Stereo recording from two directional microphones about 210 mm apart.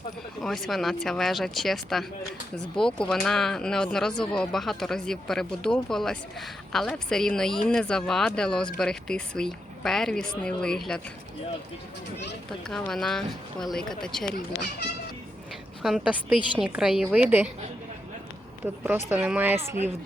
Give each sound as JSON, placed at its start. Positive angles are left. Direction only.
{"t": 0.4, "sound": "speech", "side_deg": 0}
{"t": 12.6, "sound": "speech", "side_deg": 0}
{"t": 14.3, "sound": "speech", "side_deg": 45}
{"t": 15.8, "sound": "speech", "side_deg": 0}
{"t": 18.6, "sound": "speech", "side_deg": -10}